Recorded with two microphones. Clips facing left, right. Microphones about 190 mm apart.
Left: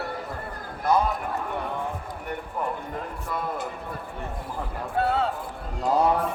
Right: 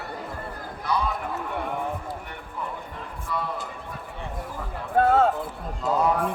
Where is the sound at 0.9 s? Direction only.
45° left (ahead or behind).